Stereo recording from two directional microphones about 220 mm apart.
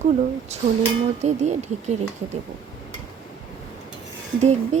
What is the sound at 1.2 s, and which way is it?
Speech, 30° right (ahead or behind).